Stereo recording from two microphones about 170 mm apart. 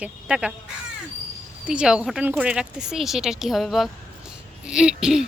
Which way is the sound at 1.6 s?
5° right (ahead or behind).